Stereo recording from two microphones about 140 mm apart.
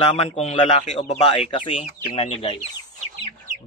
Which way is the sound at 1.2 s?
35° left (ahead or behind).